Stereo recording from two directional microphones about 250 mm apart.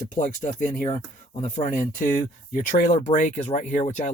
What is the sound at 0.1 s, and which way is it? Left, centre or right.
Speech, left.